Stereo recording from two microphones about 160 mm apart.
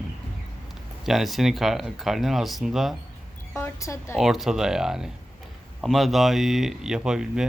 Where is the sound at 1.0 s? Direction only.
Centre (ahead or behind).